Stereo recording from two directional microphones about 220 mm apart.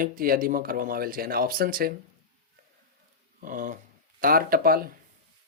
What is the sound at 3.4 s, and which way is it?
Speech, 35° right (ahead or behind).